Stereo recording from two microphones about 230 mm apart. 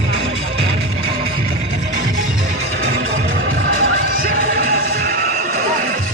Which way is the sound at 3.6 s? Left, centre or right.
Right.